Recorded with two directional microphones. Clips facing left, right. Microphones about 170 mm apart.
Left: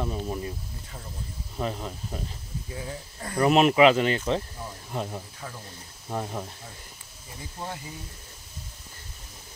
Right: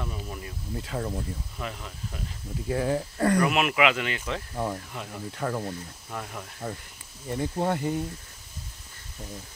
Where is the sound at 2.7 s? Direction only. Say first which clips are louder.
Right 12 dB; 80° right.